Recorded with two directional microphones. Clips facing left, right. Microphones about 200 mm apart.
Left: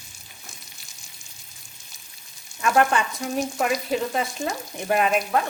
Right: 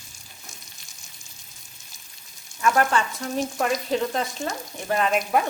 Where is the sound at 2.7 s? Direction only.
15° left (ahead or behind).